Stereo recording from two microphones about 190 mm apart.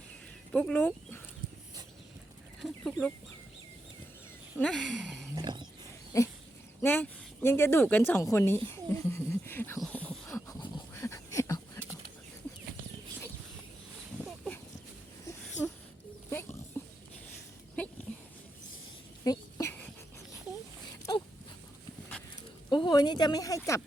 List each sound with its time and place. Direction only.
0.5 s speech: 5° left (ahead or behind)
2.6 s chicken: centre (ahead or behind)
4.5 s speech: 5° left (ahead or behind)
5.3 s roaring cats: 20° right (ahead or behind)
6.1 s speech: 15° left (ahead or behind)
6.8 s a sound: 10° left (ahead or behind)
16.3 s wild animals: 10° left (ahead or behind)
16.8 s a sound: 10° left (ahead or behind)
19.2 s a sound: 20° left (ahead or behind)
22.7 s speech: 20° left (ahead or behind)